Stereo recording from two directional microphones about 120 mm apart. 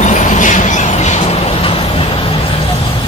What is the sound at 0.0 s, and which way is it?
Vehicle, 85° left.